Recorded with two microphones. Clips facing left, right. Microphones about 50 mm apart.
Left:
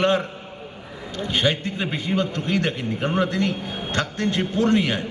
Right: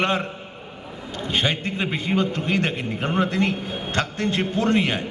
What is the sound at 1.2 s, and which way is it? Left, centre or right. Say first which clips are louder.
Speech: left 1 dB; right.